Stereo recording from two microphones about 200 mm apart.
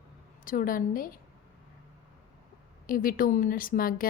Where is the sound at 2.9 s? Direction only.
45° left (ahead or behind).